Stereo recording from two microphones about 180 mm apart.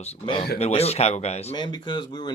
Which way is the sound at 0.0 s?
30° left (ahead or behind).